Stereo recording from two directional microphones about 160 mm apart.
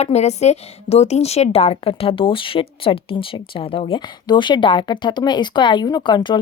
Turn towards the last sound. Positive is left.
turn(degrees=30)  # may be behind; listen again after turning